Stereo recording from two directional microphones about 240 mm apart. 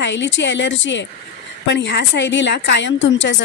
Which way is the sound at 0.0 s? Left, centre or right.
Left.